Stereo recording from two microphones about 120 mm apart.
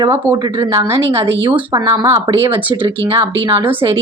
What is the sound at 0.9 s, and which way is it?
Speech, 50° right (ahead or behind).